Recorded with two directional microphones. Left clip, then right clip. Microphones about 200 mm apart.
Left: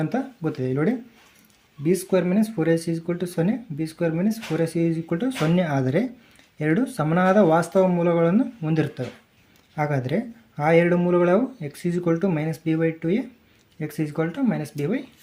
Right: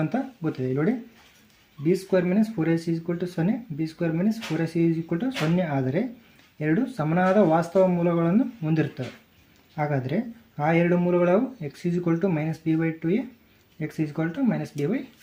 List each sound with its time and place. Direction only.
0.0 s speech: 15° left (ahead or behind)